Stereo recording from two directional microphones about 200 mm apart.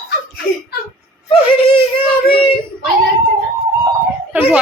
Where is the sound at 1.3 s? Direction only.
25° left (ahead or behind).